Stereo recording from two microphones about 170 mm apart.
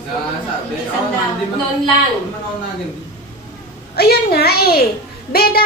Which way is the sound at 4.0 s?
65° left (ahead or behind).